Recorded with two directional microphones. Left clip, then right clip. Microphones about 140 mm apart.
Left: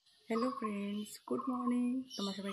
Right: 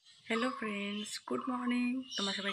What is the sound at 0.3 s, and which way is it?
Speech, 15° left (ahead or behind).